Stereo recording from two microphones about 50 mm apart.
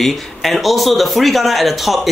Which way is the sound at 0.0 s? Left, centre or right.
Centre.